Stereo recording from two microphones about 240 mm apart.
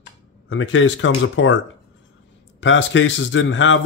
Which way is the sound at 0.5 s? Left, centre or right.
Left.